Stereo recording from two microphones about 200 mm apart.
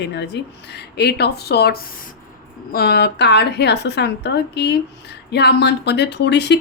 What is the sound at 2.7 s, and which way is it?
Speech, 55° left (ahead or behind).